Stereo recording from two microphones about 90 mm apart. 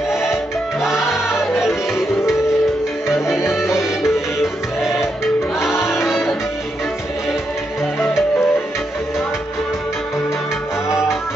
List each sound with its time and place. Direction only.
0.7 s music: 5° right (ahead or behind)
3.5 s music: 5° right (ahead or behind)
5.6 s music: 30° left (ahead or behind)
8.0 s music: 30° left (ahead or behind)